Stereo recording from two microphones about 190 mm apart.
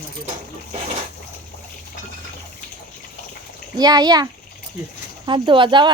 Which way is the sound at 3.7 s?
20° right (ahead or behind).